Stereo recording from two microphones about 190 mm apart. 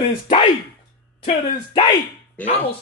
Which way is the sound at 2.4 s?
10° left (ahead or behind).